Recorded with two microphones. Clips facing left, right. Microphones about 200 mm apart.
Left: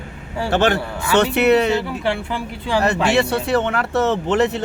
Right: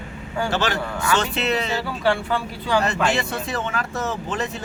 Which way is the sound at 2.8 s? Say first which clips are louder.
Left 5 dB; 65° left (ahead or behind).